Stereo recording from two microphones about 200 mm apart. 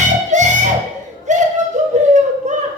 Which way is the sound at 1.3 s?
35° right (ahead or behind).